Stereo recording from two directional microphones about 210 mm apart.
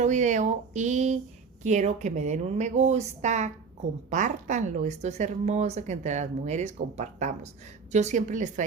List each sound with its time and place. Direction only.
0.0 s a woman's voice: 35° right (ahead or behind)